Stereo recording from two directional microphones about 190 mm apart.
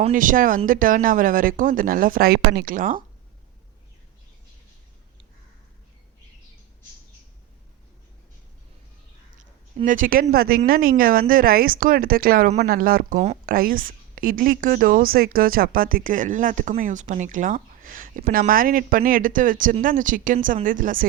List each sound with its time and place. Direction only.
0.1 s a woman's voice: 45° right (ahead or behind)
9.7 s a woman's voice: 45° right (ahead or behind)
13.1 s speech: 35° right (ahead or behind)
13.4 s a woman's voice: 50° right (ahead or behind)